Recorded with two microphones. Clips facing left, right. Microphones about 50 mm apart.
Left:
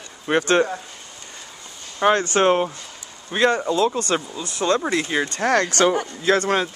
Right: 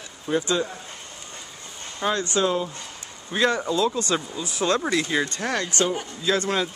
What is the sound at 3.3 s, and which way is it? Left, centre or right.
Speech, left.